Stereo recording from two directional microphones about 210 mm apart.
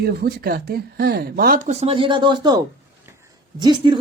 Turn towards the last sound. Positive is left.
turn(degrees=-20)  # may be behind; listen again after turning